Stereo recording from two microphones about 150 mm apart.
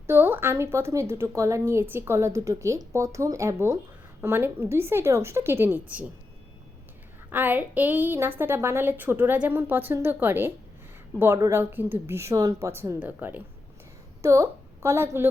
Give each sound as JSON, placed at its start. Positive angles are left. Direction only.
{"t": 0.1, "sound": "a woman's voice", "side_deg": -15}
{"t": 7.3, "sound": "a woman's voice", "side_deg": -10}